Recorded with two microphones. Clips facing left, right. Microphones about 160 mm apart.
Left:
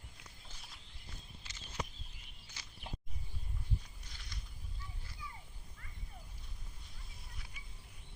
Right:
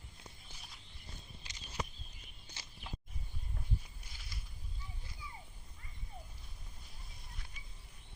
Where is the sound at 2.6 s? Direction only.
30° right (ahead or behind).